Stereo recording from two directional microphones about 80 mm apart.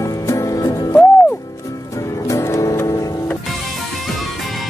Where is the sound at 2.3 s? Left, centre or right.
Left.